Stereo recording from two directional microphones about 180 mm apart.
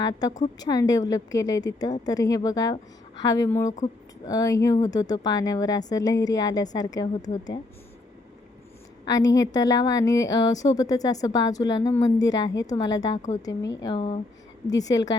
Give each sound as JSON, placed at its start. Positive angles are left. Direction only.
{"t": 0.0, "sound": "a woman's voice", "side_deg": 20}
{"t": 9.0, "sound": "a woman's voice", "side_deg": 20}